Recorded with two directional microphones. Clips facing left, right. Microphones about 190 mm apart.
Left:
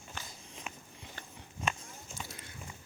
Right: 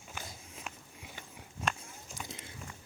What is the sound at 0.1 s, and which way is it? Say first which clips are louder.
Walk: right 2 dB; 5° right (ahead or behind).